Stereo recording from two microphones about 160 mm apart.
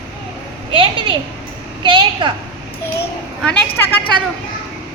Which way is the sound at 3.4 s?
10° left (ahead or behind).